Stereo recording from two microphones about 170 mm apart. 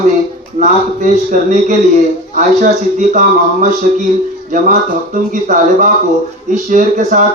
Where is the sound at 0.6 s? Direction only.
50° right (ahead or behind).